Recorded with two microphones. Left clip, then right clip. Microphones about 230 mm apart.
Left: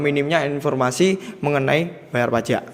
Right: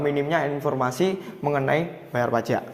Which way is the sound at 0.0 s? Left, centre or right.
Left.